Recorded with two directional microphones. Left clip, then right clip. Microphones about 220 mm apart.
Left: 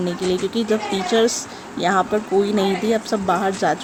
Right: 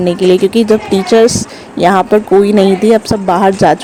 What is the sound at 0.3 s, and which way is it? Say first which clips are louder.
Speech: right 12 dB; 35° right (ahead or behind).